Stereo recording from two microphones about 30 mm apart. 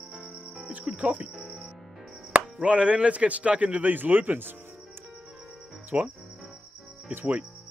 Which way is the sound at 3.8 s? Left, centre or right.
Right.